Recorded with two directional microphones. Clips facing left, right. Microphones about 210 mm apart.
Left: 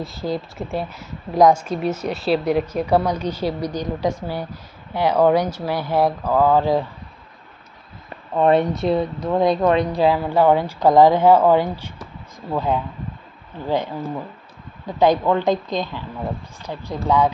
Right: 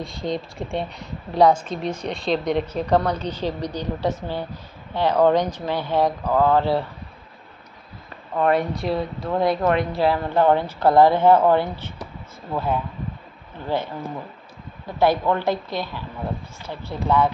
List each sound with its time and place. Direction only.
0.0 s a woman's voice: 5° left (ahead or behind)
8.4 s a woman's voice: 25° left (ahead or behind)